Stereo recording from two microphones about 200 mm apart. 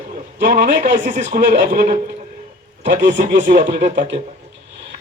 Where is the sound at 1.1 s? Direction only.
40° right (ahead or behind).